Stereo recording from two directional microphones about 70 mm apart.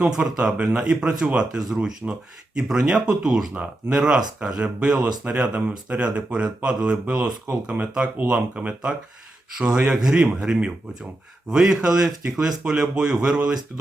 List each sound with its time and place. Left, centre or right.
0.2 s speech: centre